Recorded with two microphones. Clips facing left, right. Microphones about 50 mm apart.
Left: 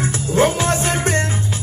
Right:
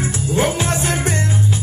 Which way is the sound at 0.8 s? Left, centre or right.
Left.